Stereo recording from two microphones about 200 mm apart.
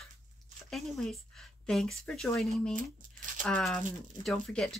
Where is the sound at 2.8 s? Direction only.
40° right (ahead or behind).